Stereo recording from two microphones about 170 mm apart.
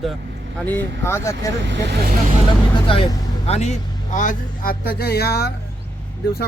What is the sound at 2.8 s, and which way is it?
A man's voice, 30° left (ahead or behind).